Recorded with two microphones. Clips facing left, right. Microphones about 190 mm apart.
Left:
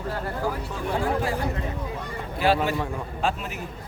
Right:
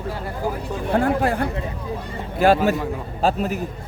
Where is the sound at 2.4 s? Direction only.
45° right (ahead or behind).